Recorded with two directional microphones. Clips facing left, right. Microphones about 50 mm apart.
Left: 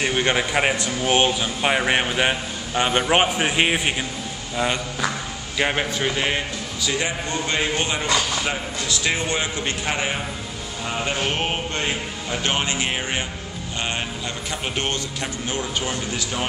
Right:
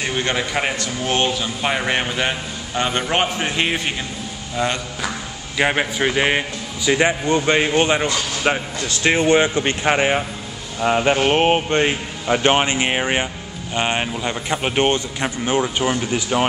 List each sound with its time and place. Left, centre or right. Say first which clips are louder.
0.0 s a man's voice: left 1 dB; centre
5.6 s a man's voice: right 4 dB; centre